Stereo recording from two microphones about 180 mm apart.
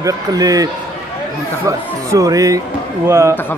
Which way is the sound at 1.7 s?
20° right (ahead or behind).